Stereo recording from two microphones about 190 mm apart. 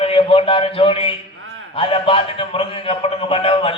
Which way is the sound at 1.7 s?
30° left (ahead or behind).